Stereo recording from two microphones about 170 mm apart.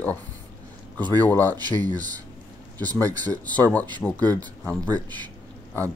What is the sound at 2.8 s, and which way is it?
Speech, 20° right (ahead or behind).